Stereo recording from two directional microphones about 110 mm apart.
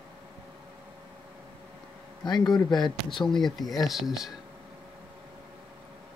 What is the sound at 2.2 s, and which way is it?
Speech, 40° left (ahead or behind).